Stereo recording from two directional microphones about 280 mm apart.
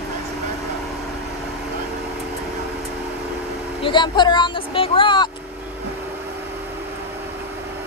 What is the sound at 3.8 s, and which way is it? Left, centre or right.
Vehicle, centre.